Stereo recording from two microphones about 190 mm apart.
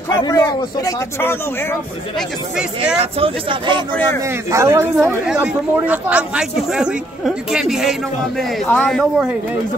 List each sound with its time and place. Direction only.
0.2 s speech: 20° left (ahead or behind)
2.1 s speech: 5° right (ahead or behind)
3.0 s speech: 30° right (ahead or behind)
4.2 s a man's voice: 15° right (ahead or behind); by 9.3 s 5° left (ahead or behind)